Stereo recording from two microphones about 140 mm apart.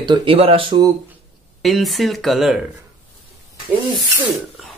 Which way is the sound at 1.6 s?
Centre (ahead or behind).